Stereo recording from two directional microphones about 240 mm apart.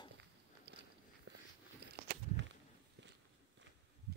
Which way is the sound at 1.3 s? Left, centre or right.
Right.